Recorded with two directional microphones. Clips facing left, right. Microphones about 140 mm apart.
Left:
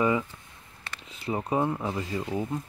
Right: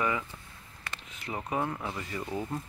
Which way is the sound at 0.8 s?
30° left (ahead or behind).